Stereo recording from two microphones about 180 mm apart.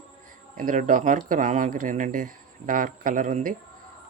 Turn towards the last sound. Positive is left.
turn(degrees=-45)  # may be behind; listen again after turning